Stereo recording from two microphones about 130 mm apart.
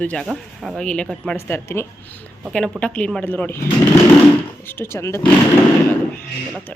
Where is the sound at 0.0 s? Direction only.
5° left (ahead or behind).